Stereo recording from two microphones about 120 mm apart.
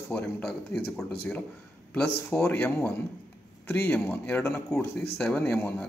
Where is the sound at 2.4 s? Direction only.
15° left (ahead or behind).